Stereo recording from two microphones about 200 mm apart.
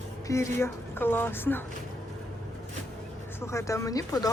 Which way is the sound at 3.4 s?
15° left (ahead or behind).